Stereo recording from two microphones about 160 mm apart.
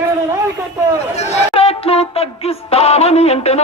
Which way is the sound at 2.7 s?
40° left (ahead or behind).